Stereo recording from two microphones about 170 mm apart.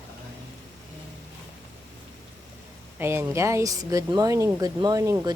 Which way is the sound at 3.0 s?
15° right (ahead or behind).